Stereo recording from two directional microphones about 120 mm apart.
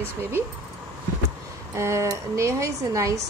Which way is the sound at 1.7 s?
25° right (ahead or behind).